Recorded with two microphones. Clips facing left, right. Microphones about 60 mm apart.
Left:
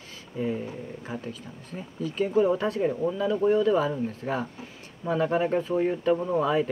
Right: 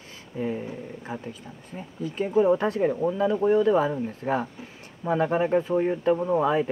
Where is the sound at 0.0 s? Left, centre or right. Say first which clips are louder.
Even; right.